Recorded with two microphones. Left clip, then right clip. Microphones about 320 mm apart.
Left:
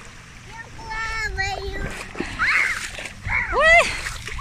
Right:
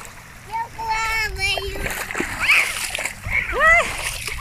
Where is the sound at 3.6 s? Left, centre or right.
Centre.